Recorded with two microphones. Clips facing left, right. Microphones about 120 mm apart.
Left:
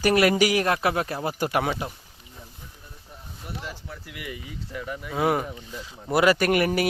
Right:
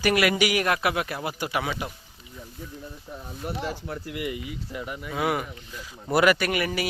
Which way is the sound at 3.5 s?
55° right (ahead or behind).